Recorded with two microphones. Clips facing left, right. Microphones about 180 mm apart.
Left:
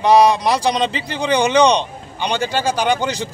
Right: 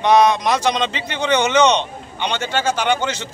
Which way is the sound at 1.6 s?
35° left (ahead or behind).